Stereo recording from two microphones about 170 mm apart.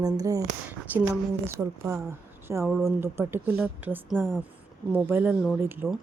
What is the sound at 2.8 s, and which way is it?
A woman's voice, 15° right (ahead or behind).